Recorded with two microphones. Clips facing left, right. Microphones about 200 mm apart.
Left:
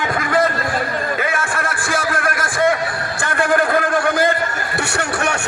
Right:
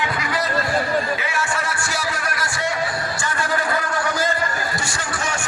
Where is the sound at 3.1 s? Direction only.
55° left (ahead or behind).